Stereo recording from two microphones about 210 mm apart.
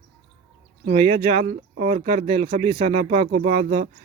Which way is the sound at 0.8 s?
30° right (ahead or behind).